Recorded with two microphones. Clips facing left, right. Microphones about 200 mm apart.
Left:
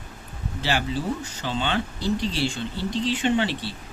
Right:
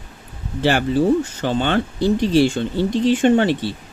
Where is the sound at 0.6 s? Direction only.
55° right (ahead or behind).